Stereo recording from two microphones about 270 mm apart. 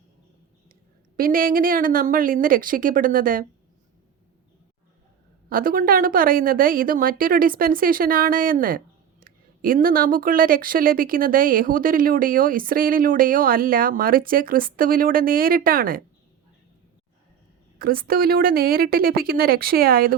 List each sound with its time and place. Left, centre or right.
1.1 s speech: right
5.5 s speech: right
17.7 s speech: right